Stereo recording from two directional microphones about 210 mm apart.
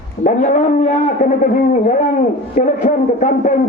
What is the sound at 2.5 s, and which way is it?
A man's voice, 35° left (ahead or behind).